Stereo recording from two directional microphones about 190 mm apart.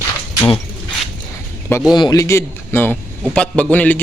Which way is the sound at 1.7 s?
20° left (ahead or behind).